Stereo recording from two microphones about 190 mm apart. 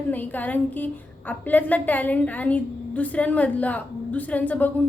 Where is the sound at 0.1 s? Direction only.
10° left (ahead or behind).